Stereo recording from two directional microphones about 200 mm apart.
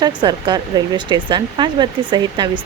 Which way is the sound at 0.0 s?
20° right (ahead or behind).